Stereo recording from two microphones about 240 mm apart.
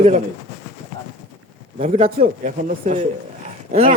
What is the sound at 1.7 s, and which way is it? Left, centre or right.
A man's voice, right.